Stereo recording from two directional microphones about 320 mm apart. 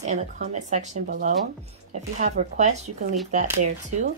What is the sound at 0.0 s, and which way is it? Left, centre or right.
Speech, right.